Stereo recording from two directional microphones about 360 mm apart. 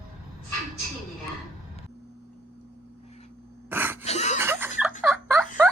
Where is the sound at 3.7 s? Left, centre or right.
Centre.